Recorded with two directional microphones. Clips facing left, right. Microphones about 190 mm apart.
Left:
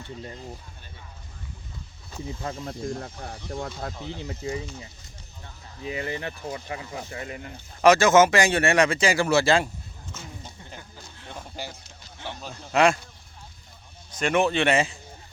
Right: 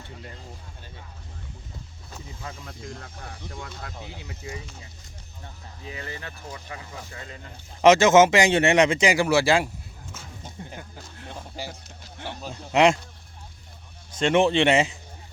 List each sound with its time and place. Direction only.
2.4 s speech: 45° left (ahead or behind)
3.9 s speech: 10° right (ahead or behind)
4.3 s speech: 25° left (ahead or behind)
5.8 s speech: 20° left (ahead or behind)
7.8 s speech: 20° right (ahead or behind)
10.7 s a sound: 5° right (ahead or behind)
12.0 s music: 5° right (ahead or behind)
12.7 s speech: 20° right (ahead or behind)
14.1 s speech: 25° right (ahead or behind)